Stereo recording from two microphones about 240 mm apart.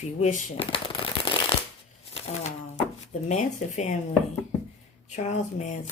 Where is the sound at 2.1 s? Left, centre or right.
Left.